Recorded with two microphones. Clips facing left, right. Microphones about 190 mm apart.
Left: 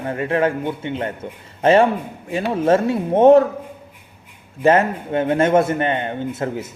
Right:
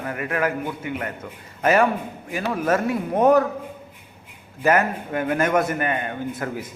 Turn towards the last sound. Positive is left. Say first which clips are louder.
# left 4 dB
turn(degrees=25)  # may be behind; listen again after turning